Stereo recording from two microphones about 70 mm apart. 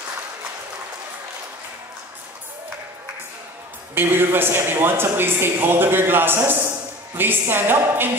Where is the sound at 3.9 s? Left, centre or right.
Right.